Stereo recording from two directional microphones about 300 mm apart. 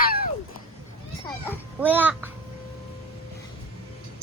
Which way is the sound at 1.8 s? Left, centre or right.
Centre.